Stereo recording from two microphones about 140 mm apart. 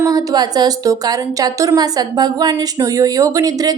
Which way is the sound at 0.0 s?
25° right (ahead or behind).